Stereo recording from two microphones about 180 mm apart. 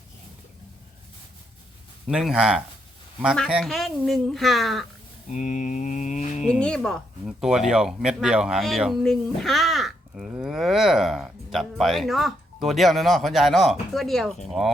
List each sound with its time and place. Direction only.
2.0 s speech: 5° right (ahead or behind)
5.3 s mantra: 45° left (ahead or behind)
6.5 s speech: 5° left (ahead or behind)